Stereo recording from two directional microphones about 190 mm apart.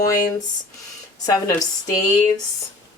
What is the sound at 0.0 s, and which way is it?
Speech, 20° left (ahead or behind).